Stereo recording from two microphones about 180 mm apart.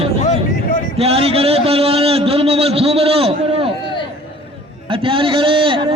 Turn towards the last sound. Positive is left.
turn(degrees=-30)  # may be behind; listen again after turning